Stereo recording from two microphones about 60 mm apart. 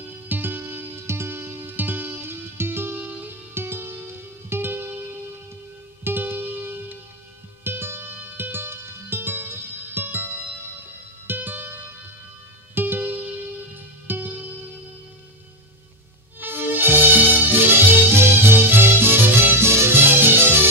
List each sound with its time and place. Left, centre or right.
0.0 s music: right
6.0 s music: right
16.3 s music: right